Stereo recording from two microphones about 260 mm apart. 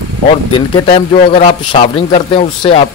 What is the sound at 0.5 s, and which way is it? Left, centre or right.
Speech, left.